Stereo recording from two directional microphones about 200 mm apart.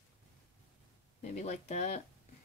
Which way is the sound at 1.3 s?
35° left (ahead or behind).